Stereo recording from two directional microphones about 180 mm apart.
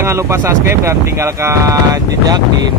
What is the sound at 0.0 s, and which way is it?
Speech, 15° right (ahead or behind).